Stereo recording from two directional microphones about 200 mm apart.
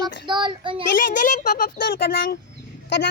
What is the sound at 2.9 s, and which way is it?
Speech, 60° left (ahead or behind).